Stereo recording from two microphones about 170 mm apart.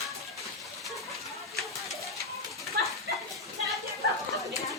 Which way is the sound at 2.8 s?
75° right (ahead or behind).